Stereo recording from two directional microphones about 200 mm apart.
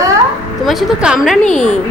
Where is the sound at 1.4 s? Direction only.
35° left (ahead or behind).